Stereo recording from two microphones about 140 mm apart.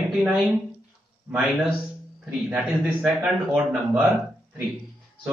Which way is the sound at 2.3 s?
Centre (ahead or behind).